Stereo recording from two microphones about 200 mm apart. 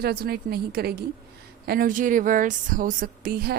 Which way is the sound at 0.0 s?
50° right (ahead or behind).